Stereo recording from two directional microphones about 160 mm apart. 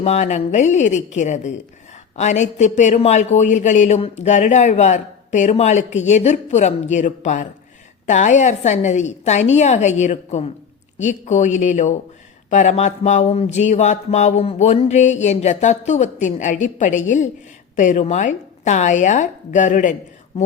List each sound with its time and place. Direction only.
0.0 s a man's voice: 45° left (ahead or behind)